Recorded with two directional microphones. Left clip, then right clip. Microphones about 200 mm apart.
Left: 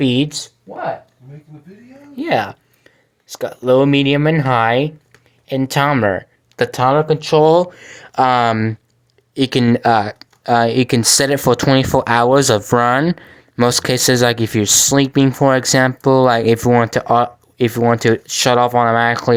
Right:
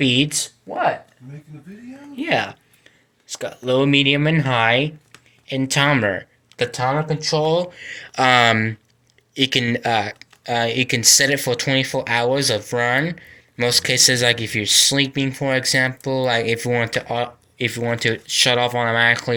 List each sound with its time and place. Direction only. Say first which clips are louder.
0.0 s speech: left 1 dB; 25° left (ahead or behind)
0.7 s speech: right 3 dB; centre (ahead or behind)
2.1 s speech: left 3 dB; 25° left (ahead or behind)
6.6 s speech: left 7 dB; 45° left (ahead or behind)
7.9 s speech: left 2 dB; 20° left (ahead or behind)